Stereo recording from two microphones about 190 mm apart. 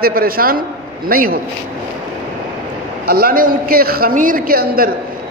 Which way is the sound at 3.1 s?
50° right (ahead or behind).